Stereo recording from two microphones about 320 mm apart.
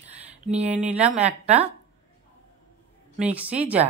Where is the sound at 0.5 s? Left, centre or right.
Centre.